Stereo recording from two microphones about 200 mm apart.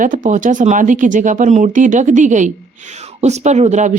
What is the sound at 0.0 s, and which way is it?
A woman's voice, 40° right (ahead or behind).